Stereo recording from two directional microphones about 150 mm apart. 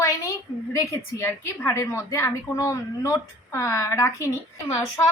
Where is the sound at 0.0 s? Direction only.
20° left (ahead or behind).